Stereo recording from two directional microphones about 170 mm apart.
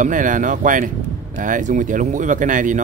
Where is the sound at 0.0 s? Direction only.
50° right (ahead or behind).